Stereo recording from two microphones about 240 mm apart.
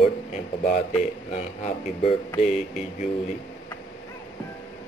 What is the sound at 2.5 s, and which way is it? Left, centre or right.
Speech, centre.